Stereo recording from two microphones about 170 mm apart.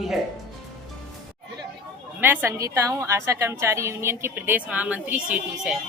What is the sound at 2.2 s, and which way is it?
A woman's voice, 15° right (ahead or behind).